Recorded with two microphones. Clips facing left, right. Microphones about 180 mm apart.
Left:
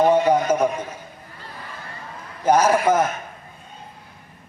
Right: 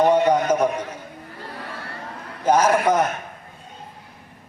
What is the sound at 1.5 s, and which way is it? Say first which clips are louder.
Crowd: right 2 dB; 70° right (ahead or behind).